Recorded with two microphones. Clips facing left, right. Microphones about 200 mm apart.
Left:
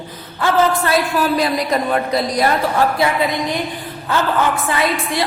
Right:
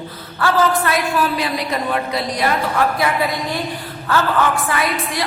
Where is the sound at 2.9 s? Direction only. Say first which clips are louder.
Left 2 dB; 20° left (ahead or behind).